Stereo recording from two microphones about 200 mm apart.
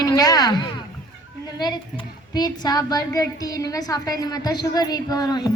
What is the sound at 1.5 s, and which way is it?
A woman's voice, 20° left (ahead or behind).